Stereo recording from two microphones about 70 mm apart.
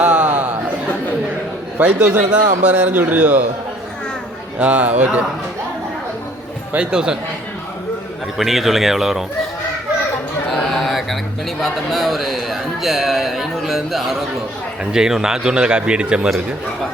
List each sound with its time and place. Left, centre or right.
0.0 s a sound: centre
1.8 s a man's voice: centre
4.6 s speech: centre
6.7 s speech: centre
8.4 s speech: centre
10.5 s a sound: centre
11.6 s speech: centre